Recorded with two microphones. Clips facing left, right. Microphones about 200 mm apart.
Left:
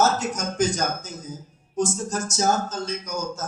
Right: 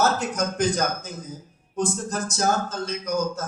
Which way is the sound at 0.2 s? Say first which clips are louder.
Even; 55° right (ahead or behind).